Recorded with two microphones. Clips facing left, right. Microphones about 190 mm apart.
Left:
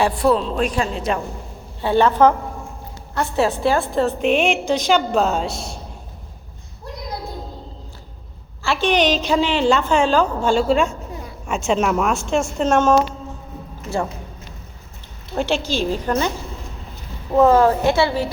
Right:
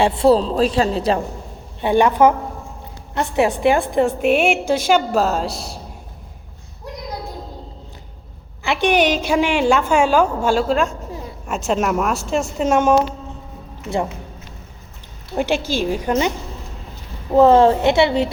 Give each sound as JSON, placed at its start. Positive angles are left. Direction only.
{"t": 0.0, "sound": "speech", "side_deg": -25}
{"t": 1.8, "sound": "a woman's voice", "side_deg": -15}
{"t": 8.6, "sound": "a woman's voice", "side_deg": -15}
{"t": 15.4, "sound": "a woman's voice", "side_deg": -10}
{"t": 17.3, "sound": "a woman's voice", "side_deg": -30}